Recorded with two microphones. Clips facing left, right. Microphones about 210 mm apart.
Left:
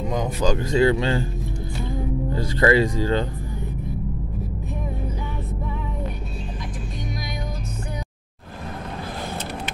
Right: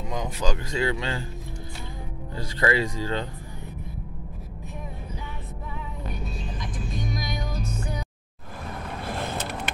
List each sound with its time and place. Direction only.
0.1 s a sound: 45° left (ahead or behind)
0.5 s speech: 35° left (ahead or behind)
2.4 s speech: 40° left (ahead or behind)